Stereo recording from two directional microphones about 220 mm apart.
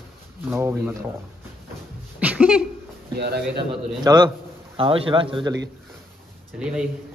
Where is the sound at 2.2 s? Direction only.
5° right (ahead or behind).